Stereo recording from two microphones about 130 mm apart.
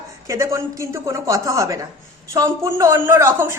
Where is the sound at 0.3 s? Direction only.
25° right (ahead or behind).